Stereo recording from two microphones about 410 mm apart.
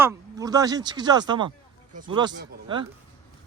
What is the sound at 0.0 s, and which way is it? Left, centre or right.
Speech, centre.